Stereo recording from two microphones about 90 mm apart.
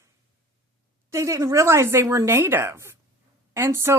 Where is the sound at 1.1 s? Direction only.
35° right (ahead or behind).